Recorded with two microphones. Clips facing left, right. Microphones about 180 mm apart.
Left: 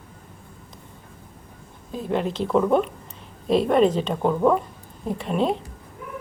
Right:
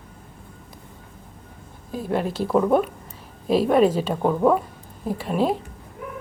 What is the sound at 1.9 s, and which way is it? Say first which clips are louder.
A woman's voice: even; 5° right (ahead or behind).